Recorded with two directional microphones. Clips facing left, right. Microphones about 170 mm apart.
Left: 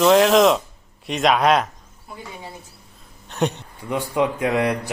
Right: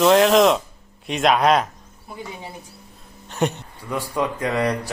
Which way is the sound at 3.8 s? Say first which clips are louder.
Left 3 dB; 20° left (ahead or behind).